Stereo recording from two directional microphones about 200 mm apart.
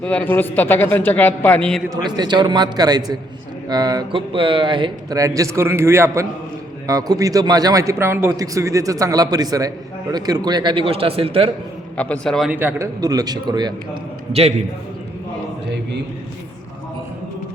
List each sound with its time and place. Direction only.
0.0 s a man's voice: 5° left (ahead or behind)
2.0 s a man's voice: 20° right (ahead or behind)
11.9 s a man's voice: 5° left (ahead or behind); by 13.7 s 20° right (ahead or behind)